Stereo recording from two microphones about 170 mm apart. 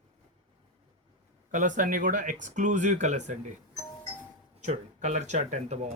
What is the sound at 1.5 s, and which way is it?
Speech, 50° right (ahead or behind).